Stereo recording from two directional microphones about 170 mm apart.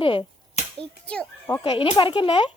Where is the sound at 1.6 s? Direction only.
30° left (ahead or behind).